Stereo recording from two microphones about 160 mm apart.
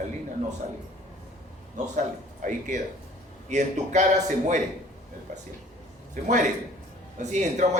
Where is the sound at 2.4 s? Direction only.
55° right (ahead or behind).